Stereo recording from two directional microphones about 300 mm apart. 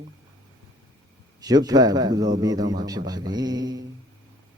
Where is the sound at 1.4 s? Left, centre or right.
Centre.